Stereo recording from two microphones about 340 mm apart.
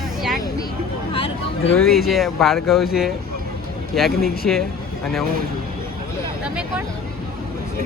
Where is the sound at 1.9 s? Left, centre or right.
Centre.